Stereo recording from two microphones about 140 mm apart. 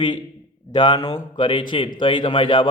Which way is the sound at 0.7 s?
30° left (ahead or behind).